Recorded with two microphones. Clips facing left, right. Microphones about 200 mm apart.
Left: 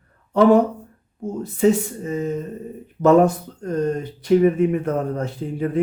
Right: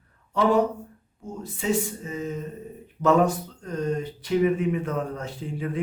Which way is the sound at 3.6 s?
45° left (ahead or behind).